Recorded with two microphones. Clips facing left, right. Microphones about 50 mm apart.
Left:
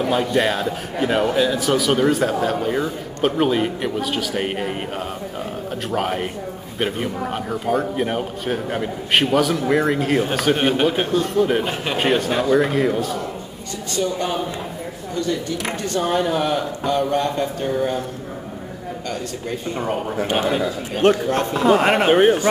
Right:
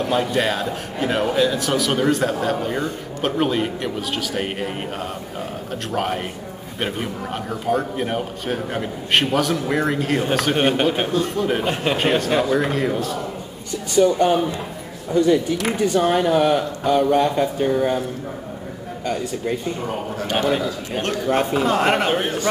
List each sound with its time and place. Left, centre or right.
0.0 s a man's voice: centre
5.9 s a man's voice: centre
13.9 s a man's voice: centre
20.3 s a man's voice: centre
21.3 s speech: centre
21.6 s a man's voice: centre
22.1 s a man's voice: left